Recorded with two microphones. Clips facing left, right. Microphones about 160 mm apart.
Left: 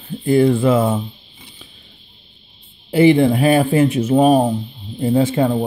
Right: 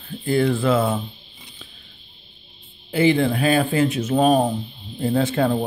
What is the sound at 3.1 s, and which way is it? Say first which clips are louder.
Speech: left 4 dB; 20° left (ahead or behind).